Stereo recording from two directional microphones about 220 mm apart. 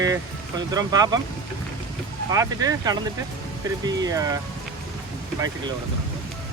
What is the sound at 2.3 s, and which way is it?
Speech, 15° right (ahead or behind).